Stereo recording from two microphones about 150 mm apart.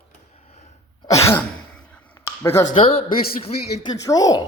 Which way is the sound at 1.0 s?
20° left (ahead or behind).